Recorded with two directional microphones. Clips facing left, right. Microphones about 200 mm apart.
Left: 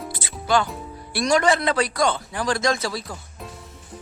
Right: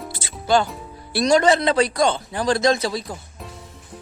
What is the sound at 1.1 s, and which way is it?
A man's voice, 25° right (ahead or behind).